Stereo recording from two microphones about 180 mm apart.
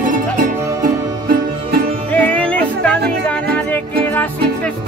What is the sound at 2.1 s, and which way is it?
Music, 10° left (ahead or behind).